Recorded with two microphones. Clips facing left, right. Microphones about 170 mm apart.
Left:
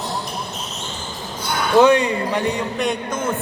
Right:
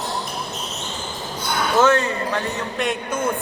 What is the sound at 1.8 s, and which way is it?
Speech, 15° left (ahead or behind).